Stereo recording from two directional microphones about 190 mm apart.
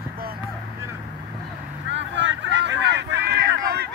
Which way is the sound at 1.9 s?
70° right (ahead or behind).